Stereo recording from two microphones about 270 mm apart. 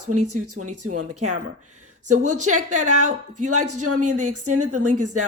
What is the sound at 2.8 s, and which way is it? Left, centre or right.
Speech, right.